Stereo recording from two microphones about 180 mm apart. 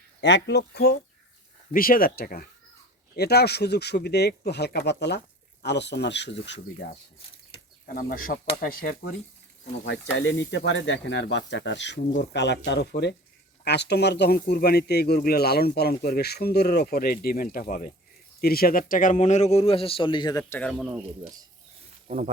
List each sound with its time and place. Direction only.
0.2 s speech: 75° left (ahead or behind)
7.9 s speech: 50° left (ahead or behind)
9.8 s speech: 85° left; by 20.8 s 5° left (ahead or behind)
22.0 s a sound: 40° right (ahead or behind)